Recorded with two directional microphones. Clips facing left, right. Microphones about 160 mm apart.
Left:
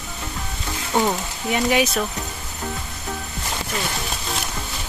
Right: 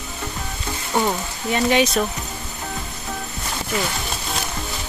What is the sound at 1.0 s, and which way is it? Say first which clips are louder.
Speech: left 1 dB; 10° left (ahead or behind).